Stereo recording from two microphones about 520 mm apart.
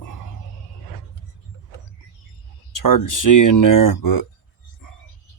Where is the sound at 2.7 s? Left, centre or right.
Left.